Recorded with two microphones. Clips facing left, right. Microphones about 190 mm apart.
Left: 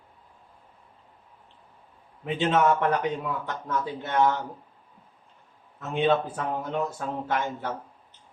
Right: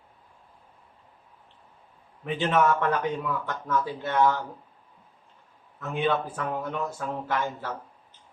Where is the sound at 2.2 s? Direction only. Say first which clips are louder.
Left 1 dB; 20° left (ahead or behind).